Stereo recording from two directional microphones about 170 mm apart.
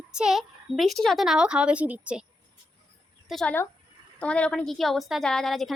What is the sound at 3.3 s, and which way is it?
A woman's voice, 5° left (ahead or behind).